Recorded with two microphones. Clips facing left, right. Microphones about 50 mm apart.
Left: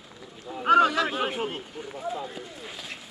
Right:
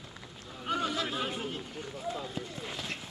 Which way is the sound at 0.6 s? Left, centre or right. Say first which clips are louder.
Left 12 dB; left.